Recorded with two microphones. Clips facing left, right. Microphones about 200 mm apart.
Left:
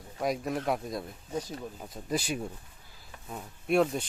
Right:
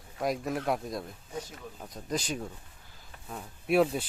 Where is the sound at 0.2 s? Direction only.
Centre (ahead or behind).